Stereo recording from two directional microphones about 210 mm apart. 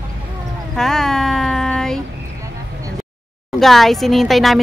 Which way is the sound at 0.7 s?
Centre (ahead or behind).